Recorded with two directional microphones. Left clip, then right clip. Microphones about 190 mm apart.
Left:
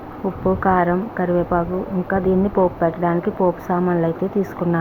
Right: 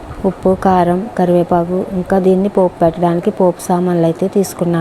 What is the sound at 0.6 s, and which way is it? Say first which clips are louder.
A woman's voice: right 5 dB; 40° right (ahead or behind).